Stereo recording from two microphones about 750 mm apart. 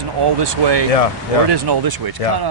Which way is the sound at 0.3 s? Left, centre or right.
Right.